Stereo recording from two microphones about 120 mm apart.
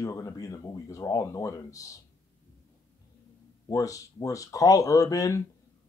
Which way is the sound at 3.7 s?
25° left (ahead or behind).